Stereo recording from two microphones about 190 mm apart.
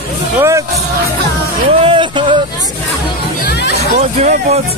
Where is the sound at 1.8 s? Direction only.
25° right (ahead or behind).